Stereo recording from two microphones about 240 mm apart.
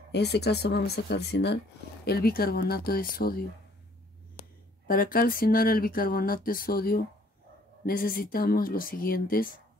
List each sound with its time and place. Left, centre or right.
0.1 s speech: left